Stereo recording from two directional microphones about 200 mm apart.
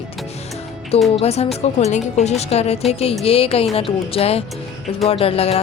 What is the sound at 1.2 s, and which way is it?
A woman's voice, 30° left (ahead or behind).